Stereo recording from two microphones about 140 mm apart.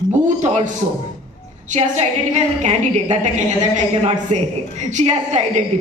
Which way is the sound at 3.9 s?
45° right (ahead or behind).